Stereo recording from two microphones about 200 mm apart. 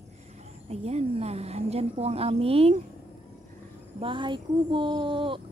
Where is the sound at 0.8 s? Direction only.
30° right (ahead or behind).